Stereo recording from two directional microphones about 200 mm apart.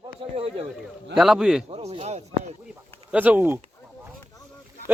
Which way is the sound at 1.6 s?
30° right (ahead or behind).